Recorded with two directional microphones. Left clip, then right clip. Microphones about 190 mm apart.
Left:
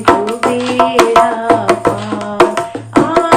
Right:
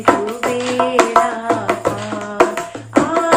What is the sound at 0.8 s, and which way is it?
Tabla, 45° left (ahead or behind).